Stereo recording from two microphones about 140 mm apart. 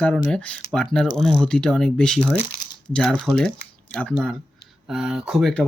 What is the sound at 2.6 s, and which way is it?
Crumpling, 30° left (ahead or behind).